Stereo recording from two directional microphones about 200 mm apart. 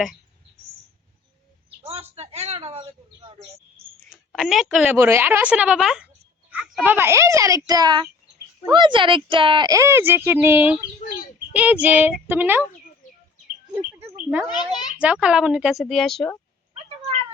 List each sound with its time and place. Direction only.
1.8 s a sound: 30° right (ahead or behind)
4.1 s a woman's voice: centre (ahead or behind)
14.2 s a child's voice: 5° right (ahead or behind)
14.5 s a child's voice: 20° left (ahead or behind)
14.9 s a woman's voice: 5° right (ahead or behind)